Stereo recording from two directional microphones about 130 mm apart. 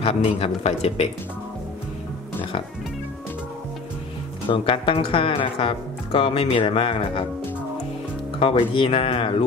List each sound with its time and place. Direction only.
0.0 s speech: 50° left (ahead or behind)
4.5 s speech: 40° left (ahead or behind)
8.4 s speech: 40° left (ahead or behind)